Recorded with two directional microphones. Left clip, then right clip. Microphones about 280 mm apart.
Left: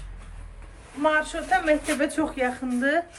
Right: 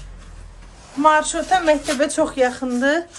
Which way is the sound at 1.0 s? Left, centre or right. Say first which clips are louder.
Right 8 dB; centre.